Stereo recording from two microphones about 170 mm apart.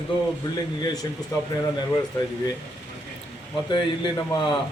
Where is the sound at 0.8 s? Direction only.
20° left (ahead or behind).